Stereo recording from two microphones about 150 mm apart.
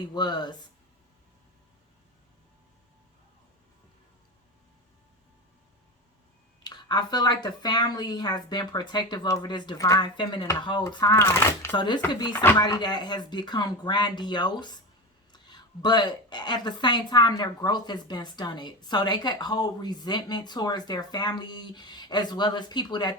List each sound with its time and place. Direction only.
0.0 s speech: 30° left (ahead or behind)
6.7 s speech: 30° left (ahead or behind)
12.5 s speech: 30° left (ahead or behind)